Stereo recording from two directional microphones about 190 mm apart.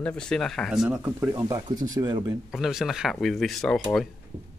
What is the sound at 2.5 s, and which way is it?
Speech, centre (ahead or behind).